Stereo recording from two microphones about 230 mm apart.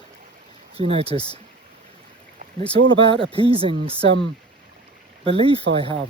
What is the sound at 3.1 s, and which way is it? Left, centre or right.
Speech, right.